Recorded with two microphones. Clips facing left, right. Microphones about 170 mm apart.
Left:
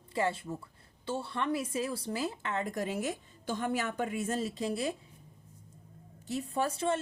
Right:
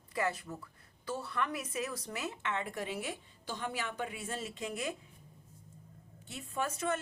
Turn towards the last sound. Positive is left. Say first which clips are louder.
# left 4 dB
turn(degrees=30)  # may be behind; listen again after turning